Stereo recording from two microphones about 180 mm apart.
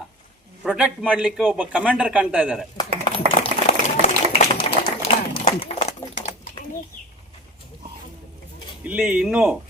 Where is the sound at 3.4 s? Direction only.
40° left (ahead or behind).